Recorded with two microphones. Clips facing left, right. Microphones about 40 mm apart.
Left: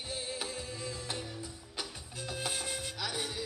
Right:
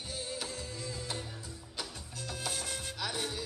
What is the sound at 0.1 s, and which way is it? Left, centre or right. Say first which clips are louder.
Music: left 1 dB; left.